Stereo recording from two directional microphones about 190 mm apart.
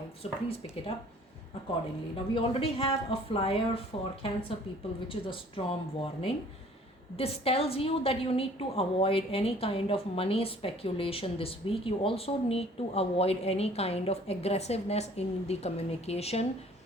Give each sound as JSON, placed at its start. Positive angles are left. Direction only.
{"t": 0.2, "sound": "a woman's voice", "side_deg": 30}
{"t": 2.3, "sound": "a woman's voice", "side_deg": 30}